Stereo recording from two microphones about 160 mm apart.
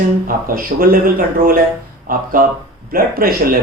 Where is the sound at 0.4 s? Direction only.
65° right (ahead or behind).